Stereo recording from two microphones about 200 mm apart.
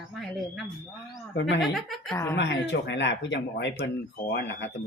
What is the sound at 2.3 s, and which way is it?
Speech, 60° left (ahead or behind).